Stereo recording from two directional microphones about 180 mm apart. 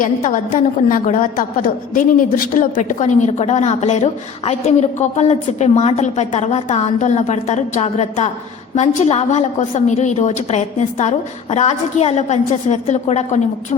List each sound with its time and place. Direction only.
0.0 s a woman's voice: 45° left (ahead or behind)